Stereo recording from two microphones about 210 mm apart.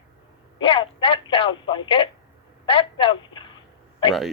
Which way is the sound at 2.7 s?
25° left (ahead or behind).